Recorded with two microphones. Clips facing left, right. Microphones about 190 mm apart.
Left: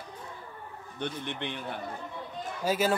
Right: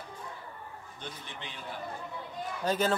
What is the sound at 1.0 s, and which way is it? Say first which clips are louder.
Speech: left 10 dB; 65° left (ahead or behind).